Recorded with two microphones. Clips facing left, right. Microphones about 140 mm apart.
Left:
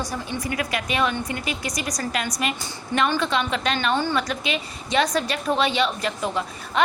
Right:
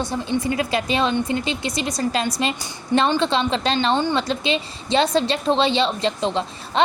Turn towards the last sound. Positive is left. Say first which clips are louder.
# right 2 dB
turn(degrees=-25)  # may be behind; listen again after turning